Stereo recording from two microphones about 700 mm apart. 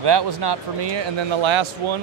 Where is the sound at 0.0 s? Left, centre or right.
Right.